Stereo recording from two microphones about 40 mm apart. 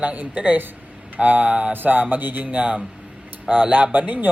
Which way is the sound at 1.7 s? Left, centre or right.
Right.